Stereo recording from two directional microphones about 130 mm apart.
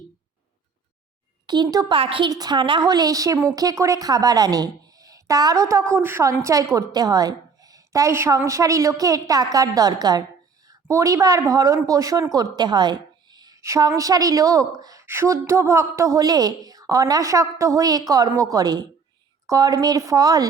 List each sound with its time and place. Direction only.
1.5 s speech: 35° right (ahead or behind)
2.0 s a woman's voice: 45° right (ahead or behind)
2.3 s a woman's voice: 30° right (ahead or behind)